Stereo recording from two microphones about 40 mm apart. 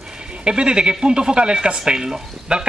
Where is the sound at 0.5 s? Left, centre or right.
Right.